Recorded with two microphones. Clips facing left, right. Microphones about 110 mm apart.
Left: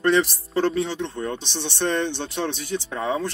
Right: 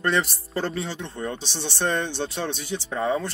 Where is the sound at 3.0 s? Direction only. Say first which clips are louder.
Right 1 dB; centre (ahead or behind).